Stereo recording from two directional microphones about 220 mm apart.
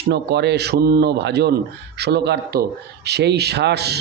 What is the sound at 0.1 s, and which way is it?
A man's voice, 50° right (ahead or behind).